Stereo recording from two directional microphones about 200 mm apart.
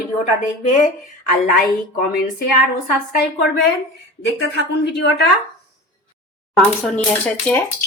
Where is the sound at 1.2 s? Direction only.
45° left (ahead or behind).